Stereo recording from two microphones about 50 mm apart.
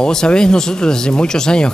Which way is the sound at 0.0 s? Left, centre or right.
Centre.